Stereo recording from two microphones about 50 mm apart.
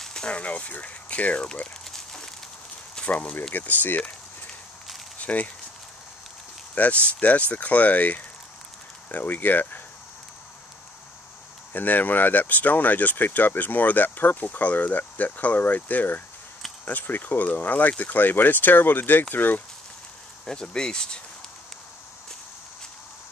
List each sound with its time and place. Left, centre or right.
0.0 s a sound: centre
0.4 s speech: left
1.9 s a sound: centre
3.1 s speech: left
5.2 s speech: left
6.7 s speech: left
11.7 s speech: left
20.4 s speech: centre